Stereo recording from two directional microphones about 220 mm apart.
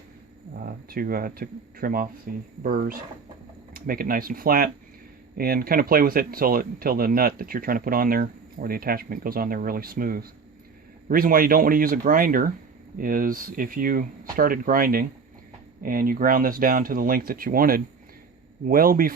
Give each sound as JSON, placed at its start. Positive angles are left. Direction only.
{"t": 0.6, "sound": "speech", "side_deg": -40}